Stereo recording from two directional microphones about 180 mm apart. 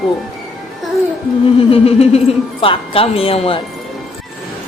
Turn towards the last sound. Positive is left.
turn(degrees=30)  # may be behind; listen again after turning